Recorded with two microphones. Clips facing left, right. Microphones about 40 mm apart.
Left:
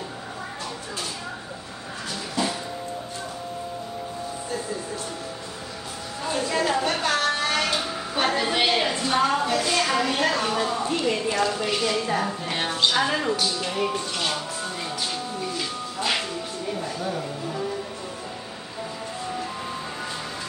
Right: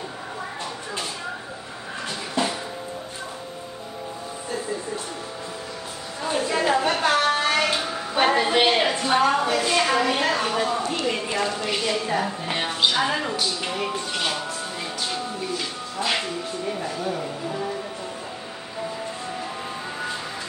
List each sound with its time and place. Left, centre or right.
2.4 s music: right
6.2 s a sound: centre
11.1 s a woman's voice: centre
13.7 s music: centre